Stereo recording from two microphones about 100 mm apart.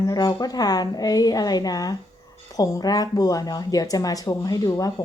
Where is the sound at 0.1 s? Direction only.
40° left (ahead or behind).